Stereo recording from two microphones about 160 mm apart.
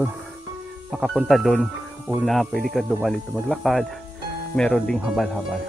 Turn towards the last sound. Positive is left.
turn(degrees=0)  # may be behind; listen again after turning